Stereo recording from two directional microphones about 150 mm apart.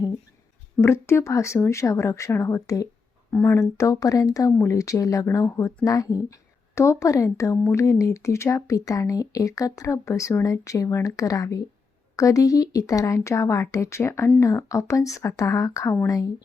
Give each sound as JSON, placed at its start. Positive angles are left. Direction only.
{"t": 0.8, "sound": "speech", "side_deg": 15}